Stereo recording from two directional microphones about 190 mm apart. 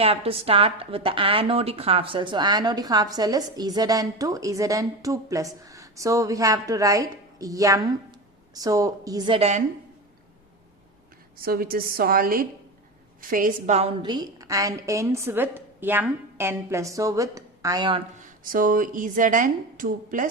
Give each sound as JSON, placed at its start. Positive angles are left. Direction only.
{"t": 0.0, "sound": "a woman's voice", "side_deg": -30}
{"t": 11.3, "sound": "a woman's voice", "side_deg": -50}
{"t": 18.2, "sound": "a woman's voice", "side_deg": -45}